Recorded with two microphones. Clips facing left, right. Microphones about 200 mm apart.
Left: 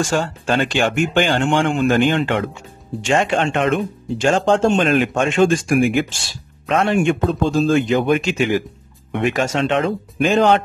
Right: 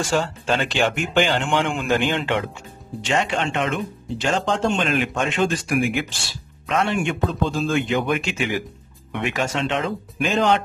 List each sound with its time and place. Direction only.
0.7 s speech: 50° left (ahead or behind)